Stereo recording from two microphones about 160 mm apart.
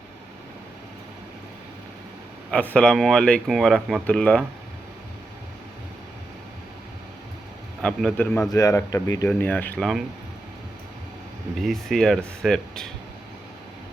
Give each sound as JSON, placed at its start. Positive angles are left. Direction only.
{"t": 2.5, "sound": "speech", "side_deg": 10}
{"t": 7.8, "sound": "speech", "side_deg": 5}
{"t": 11.5, "sound": "speech", "side_deg": 0}